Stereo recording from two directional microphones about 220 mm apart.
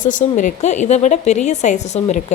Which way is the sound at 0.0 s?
35° left (ahead or behind).